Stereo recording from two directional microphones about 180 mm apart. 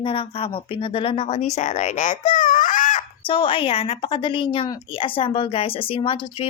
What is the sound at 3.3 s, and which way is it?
A child's voice, 30° left (ahead or behind).